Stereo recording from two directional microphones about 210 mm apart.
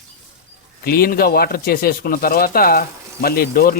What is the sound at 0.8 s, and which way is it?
Speech, 45° left (ahead or behind).